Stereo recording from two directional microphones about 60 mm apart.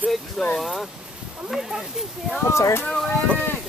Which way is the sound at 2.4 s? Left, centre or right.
Left.